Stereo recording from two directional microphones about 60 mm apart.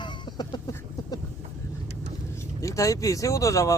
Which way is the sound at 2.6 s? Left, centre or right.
Left.